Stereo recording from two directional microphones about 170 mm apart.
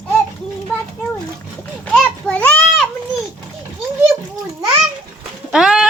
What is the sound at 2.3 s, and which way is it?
Children playing, 10° left (ahead or behind).